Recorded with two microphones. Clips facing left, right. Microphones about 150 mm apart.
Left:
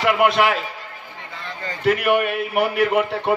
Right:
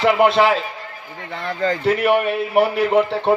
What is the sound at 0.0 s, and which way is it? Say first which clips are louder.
Speech: right 3 dB; 30° right (ahead or behind).